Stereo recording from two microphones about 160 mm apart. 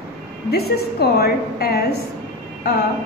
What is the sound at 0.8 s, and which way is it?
A woman's voice, 80° left.